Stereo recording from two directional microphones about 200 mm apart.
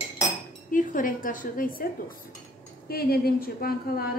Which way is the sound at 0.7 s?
40° left (ahead or behind).